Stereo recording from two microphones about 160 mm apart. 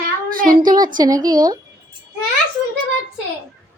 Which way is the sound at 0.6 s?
25° right (ahead or behind).